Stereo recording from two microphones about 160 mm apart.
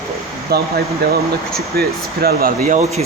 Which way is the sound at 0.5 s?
80° right.